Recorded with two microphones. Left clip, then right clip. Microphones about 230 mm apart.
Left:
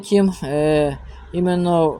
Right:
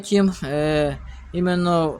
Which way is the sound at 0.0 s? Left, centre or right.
Centre.